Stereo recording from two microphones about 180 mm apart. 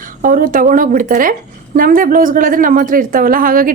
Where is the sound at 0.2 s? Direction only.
50° right (ahead or behind).